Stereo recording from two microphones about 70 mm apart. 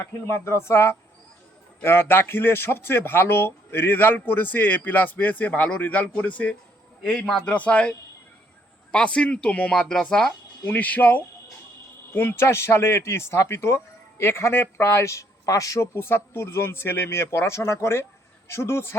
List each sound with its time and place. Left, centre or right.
0.0 s speech: left; by 6.6 s centre
7.1 s a man's voice: centre
7.4 s speech: centre
12.1 s speech: left
16.0 s speech: left